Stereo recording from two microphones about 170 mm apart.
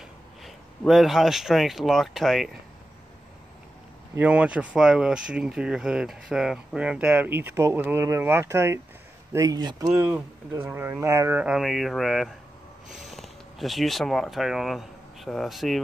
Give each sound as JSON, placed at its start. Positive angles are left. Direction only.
{"t": 0.4, "sound": "speech", "side_deg": 0}
{"t": 4.1, "sound": "speech", "side_deg": -10}
{"t": 10.0, "sound": "speech", "side_deg": -10}